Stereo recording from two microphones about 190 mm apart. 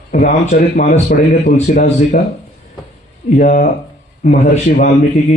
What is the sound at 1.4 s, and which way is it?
Speech, 50° left (ahead or behind).